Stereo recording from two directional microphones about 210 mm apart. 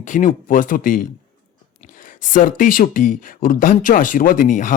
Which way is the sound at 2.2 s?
40° left (ahead or behind).